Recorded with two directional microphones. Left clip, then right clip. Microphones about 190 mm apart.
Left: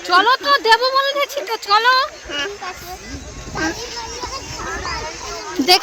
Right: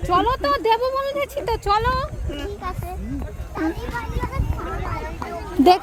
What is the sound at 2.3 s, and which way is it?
Speech, 15° left (ahead or behind).